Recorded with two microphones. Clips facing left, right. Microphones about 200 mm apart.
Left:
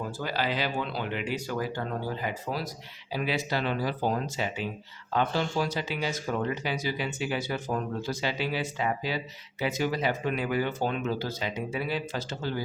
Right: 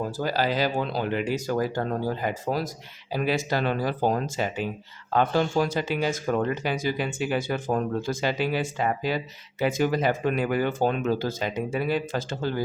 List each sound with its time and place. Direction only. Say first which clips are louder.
0.2 s speech: right 5 dB; 40° right (ahead or behind)